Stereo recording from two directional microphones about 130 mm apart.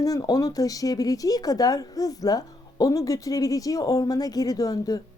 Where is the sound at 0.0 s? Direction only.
30° left (ahead or behind).